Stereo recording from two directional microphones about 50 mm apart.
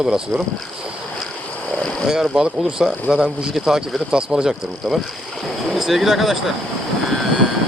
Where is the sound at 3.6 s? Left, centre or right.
Centre.